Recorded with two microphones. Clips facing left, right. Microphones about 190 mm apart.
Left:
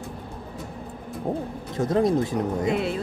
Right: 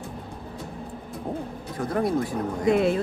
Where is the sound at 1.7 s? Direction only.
20° left (ahead or behind).